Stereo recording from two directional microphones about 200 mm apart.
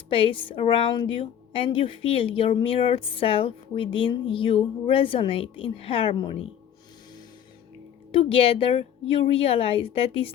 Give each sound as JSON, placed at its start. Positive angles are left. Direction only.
{"t": 0.1, "sound": "a woman's voice", "side_deg": 25}
{"t": 8.1, "sound": "a woman's voice", "side_deg": 30}